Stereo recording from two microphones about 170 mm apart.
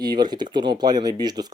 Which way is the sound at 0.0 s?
25° right (ahead or behind).